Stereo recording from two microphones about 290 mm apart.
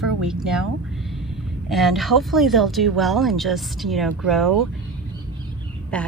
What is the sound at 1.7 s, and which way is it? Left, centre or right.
Speech, centre.